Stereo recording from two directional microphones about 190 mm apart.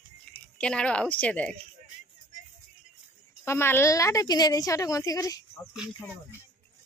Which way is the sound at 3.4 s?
10° left (ahead or behind).